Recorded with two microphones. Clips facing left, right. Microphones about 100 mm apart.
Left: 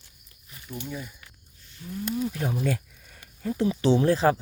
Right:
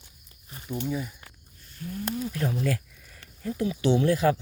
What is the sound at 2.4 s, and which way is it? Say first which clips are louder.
Speech: even; 25° left (ahead or behind).